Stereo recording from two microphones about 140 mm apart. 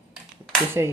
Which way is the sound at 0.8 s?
20° right (ahead or behind).